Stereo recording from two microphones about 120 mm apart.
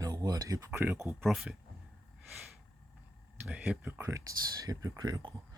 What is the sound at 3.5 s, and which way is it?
Speech, 15° right (ahead or behind).